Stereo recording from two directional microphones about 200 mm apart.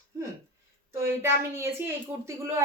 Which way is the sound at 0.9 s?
10° right (ahead or behind).